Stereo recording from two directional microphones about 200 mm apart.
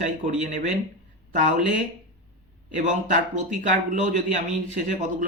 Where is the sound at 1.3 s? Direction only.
40° right (ahead or behind).